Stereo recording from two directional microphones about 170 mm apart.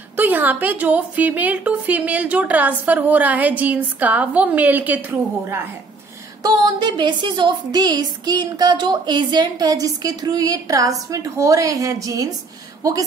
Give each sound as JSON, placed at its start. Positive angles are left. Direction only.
{"t": 0.1, "sound": "a woman's voice", "side_deg": -10}
{"t": 6.4, "sound": "a woman's voice", "side_deg": -25}